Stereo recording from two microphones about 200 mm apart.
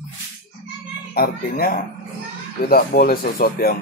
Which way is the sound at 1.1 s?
50° left (ahead or behind).